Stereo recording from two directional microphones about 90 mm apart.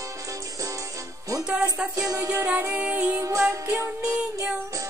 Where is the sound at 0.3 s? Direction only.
40° right (ahead or behind).